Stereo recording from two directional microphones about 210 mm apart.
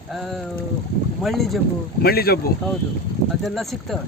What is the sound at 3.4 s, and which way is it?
Speech, centre (ahead or behind).